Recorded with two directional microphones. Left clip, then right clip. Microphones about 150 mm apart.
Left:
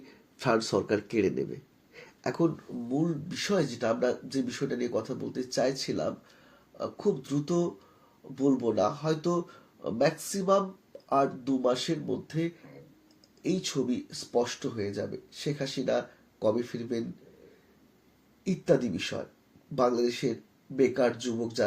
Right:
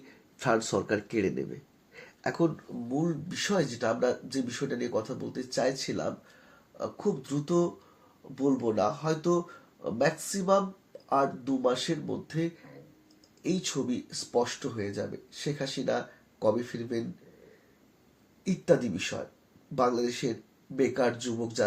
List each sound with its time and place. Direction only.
0.0 s speech: 25° left (ahead or behind)
2.9 s speech: 40° left (ahead or behind)
18.4 s speech: 40° left (ahead or behind)